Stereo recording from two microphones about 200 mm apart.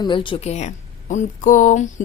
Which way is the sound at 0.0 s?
25° left (ahead or behind).